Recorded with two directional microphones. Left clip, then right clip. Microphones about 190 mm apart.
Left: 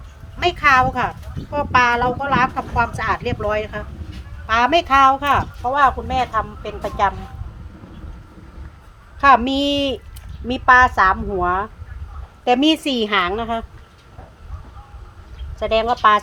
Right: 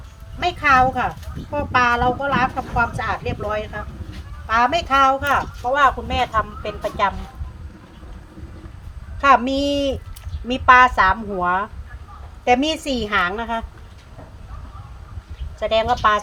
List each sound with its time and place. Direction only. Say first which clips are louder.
0.3 s a woman's voice: left 1 dB; 65° left (ahead or behind); by 7.1 s 40° left (ahead or behind)
9.2 s a woman's voice: left 2 dB; 45° left (ahead or behind)
15.5 s speech: even; 45° left (ahead or behind)